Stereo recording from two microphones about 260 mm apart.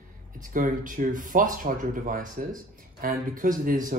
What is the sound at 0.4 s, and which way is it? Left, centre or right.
A man's voice, right.